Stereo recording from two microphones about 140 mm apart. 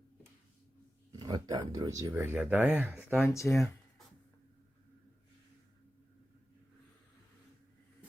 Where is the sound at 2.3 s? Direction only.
10° right (ahead or behind).